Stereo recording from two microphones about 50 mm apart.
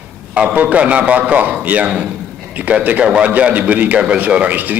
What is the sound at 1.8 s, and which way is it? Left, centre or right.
Speech, centre.